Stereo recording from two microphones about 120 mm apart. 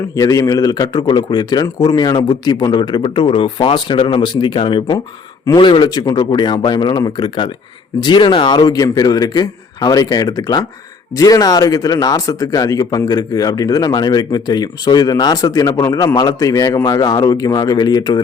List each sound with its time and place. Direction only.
0.1 s speech: 30° left (ahead or behind)